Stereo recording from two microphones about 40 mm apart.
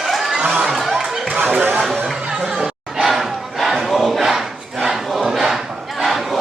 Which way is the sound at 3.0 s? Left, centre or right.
Centre.